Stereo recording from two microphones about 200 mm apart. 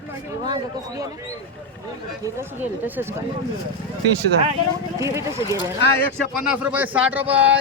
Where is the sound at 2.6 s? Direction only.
10° right (ahead or behind).